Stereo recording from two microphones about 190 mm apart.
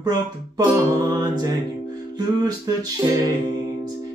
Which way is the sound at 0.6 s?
20° right (ahead or behind).